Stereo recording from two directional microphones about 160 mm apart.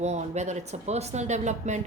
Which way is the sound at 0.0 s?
45° right (ahead or behind).